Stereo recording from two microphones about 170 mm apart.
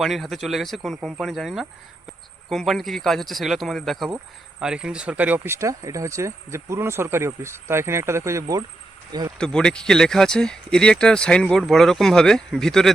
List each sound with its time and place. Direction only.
0.0 s speech: centre (ahead or behind); by 8.6 s 20° right (ahead or behind)
9.4 s speech: 5° left (ahead or behind)